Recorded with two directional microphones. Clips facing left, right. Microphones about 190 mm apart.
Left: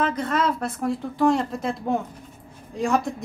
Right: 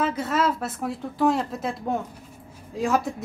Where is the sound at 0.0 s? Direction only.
5° right (ahead or behind).